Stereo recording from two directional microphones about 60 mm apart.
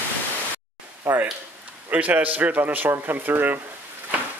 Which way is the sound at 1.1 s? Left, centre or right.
Right.